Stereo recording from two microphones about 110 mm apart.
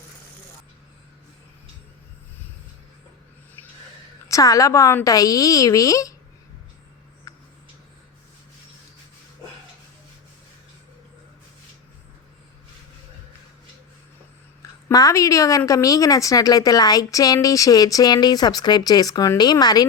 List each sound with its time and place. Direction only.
4.3 s a woman's voice: 30° left (ahead or behind)
7.3 s a sound: 30° left (ahead or behind)
14.6 s a woman's voice: 30° left (ahead or behind)